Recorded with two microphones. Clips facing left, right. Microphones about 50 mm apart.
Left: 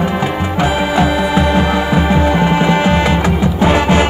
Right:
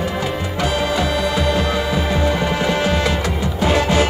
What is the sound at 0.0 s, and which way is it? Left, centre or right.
Music, left.